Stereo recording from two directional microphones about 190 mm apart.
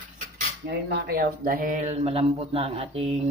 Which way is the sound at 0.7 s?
55° right (ahead or behind).